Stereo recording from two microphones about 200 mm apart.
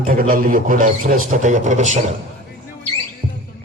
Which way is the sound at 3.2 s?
30° right (ahead or behind).